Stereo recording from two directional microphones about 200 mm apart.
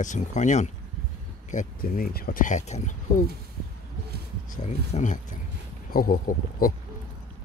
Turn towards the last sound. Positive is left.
turn(degrees=45)  # may be behind; listen again after turning